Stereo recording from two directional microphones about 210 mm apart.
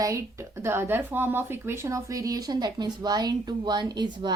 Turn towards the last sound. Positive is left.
turn(degrees=-20)  # may be behind; listen again after turning